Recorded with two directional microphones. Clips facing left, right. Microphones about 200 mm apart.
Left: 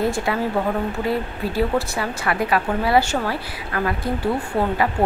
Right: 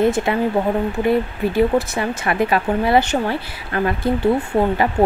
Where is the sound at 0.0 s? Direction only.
20° right (ahead or behind).